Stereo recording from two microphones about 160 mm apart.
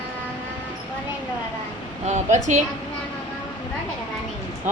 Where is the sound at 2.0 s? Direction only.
45° right (ahead or behind).